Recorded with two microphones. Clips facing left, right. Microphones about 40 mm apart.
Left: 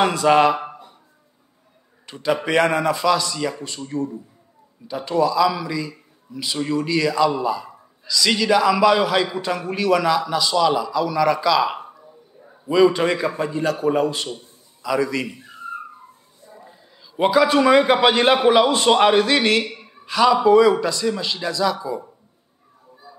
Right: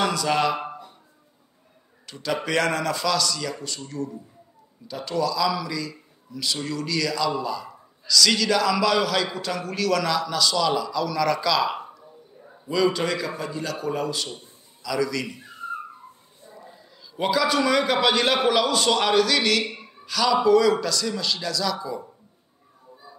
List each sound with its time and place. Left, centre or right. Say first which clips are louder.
0.0 s a man's voice: left 7 dB; left
2.0 s a man's voice: left 5 dB; left
16.4 s a man's voice: left 1 dB; left